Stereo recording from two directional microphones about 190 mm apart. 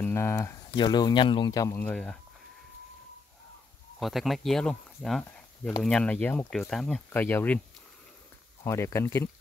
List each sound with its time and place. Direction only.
0.0 s speech: 15° left (ahead or behind)
1.8 s speech: 5° left (ahead or behind)
4.0 s speech: centre (ahead or behind)
8.6 s speech: 15° left (ahead or behind)